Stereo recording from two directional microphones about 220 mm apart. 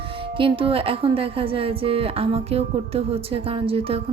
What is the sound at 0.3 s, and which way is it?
A woman's voice, 25° right (ahead or behind).